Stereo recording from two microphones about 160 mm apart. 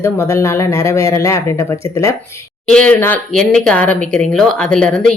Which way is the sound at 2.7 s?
10° left (ahead or behind).